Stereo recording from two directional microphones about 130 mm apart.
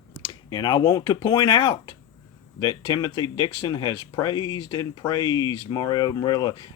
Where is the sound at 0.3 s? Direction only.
35° left (ahead or behind).